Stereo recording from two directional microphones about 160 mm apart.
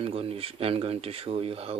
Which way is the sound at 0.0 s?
35° right (ahead or behind).